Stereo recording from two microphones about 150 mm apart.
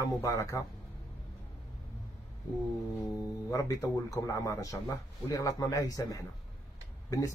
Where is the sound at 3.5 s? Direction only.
25° left (ahead or behind).